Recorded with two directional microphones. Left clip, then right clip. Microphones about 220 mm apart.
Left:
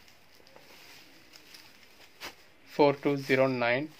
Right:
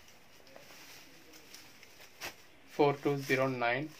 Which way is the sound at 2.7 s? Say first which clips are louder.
Left 5 dB; 45° left (ahead or behind).